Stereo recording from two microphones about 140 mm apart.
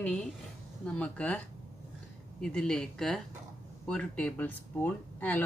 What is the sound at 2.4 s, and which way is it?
Speech, 5° left (ahead or behind).